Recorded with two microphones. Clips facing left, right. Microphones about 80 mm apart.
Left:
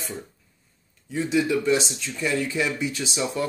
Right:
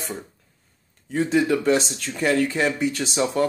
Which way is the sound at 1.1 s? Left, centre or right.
Right.